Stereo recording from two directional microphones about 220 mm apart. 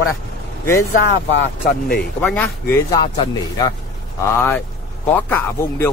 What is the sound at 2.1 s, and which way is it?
Speech, 10° left (ahead or behind).